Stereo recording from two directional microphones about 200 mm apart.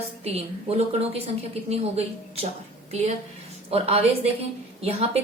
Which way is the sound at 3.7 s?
30° right (ahead or behind).